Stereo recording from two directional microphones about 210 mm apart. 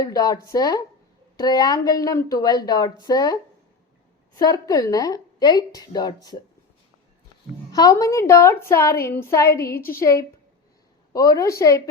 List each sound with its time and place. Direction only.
0.0 s a woman's voice: 15° left (ahead or behind)
4.4 s a woman's voice: 15° left (ahead or behind)
7.7 s a woman's voice: 15° left (ahead or behind)